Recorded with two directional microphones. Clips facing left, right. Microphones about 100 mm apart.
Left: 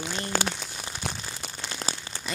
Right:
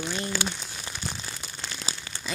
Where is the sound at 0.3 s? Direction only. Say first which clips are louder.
Left 6 dB; 45° left (ahead or behind).